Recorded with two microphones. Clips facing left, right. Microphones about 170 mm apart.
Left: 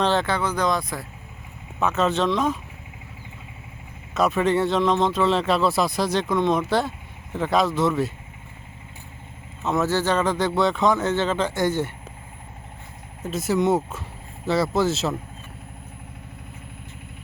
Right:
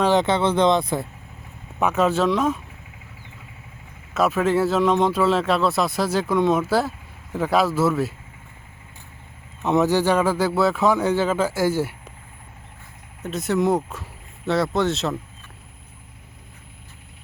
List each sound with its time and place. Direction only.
0.0 s speech: 15° right (ahead or behind)
1.8 s speech: 10° right (ahead or behind)
4.1 s a man's voice: 5° right (ahead or behind)
9.6 s speech: 15° right (ahead or behind)
13.2 s a man's voice: centre (ahead or behind)